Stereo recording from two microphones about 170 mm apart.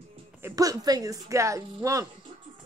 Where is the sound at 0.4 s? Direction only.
15° right (ahead or behind).